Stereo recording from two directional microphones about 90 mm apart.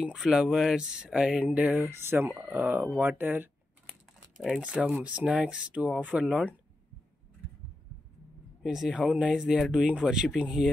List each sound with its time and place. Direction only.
0.0 s speech: 5° right (ahead or behind)
4.6 s speech: 15° right (ahead or behind)
8.6 s speech: 5° right (ahead or behind)